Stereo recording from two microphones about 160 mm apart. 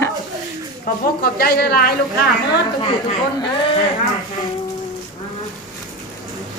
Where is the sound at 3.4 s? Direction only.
30° left (ahead or behind).